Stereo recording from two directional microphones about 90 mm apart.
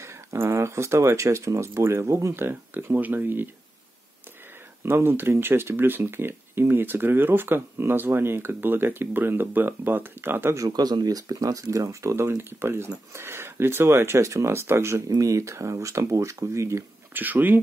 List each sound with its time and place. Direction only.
0.0 s speech: 30° right (ahead or behind)
4.8 s speech: 25° right (ahead or behind)
10.6 s speech: 50° right (ahead or behind); by 17.2 s 30° right (ahead or behind)
17.2 s speech: 20° right (ahead or behind)